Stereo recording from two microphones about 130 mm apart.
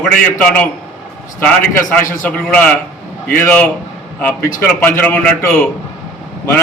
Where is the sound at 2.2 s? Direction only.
10° left (ahead or behind).